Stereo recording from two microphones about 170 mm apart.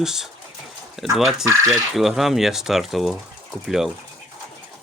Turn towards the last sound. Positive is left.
turn(degrees=0)  # may be behind; listen again after turning